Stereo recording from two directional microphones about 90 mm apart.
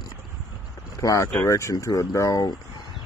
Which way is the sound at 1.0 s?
35° left (ahead or behind).